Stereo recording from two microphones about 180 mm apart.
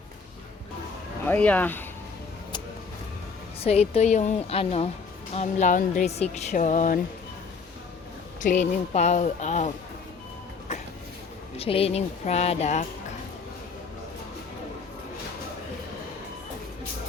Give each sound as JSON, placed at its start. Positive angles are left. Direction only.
{"t": 1.3, "sound": "speech", "side_deg": 10}
{"t": 3.6, "sound": "speech", "side_deg": 35}
{"t": 8.9, "sound": "speech", "side_deg": 40}
{"t": 10.7, "sound": "a sound", "side_deg": 35}
{"t": 11.5, "sound": "speech", "side_deg": 35}